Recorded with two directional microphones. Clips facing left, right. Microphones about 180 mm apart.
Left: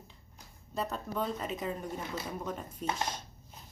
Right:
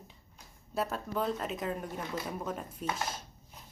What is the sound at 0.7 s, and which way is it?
A woman's voice, 5° right (ahead or behind).